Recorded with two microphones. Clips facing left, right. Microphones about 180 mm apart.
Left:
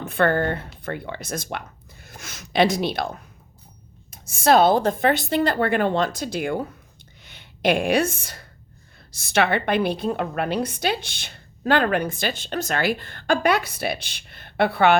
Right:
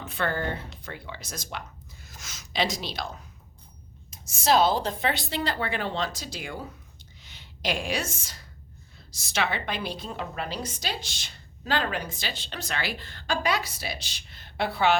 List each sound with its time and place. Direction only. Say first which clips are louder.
0.0 s a woman's voice: left 8 dB; 55° left (ahead or behind)